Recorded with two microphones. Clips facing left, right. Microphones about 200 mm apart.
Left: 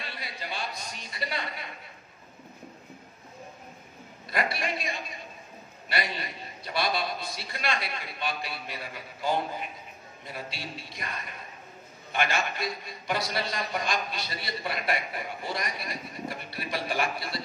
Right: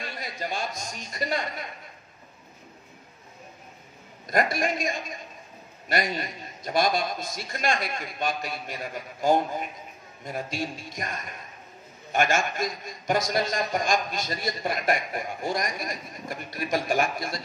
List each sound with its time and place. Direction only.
0.0 s a man's voice: 45° right (ahead or behind)
4.3 s a man's voice: 45° right (ahead or behind)